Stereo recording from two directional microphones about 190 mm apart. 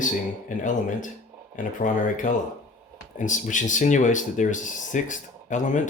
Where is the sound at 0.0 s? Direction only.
40° left (ahead or behind).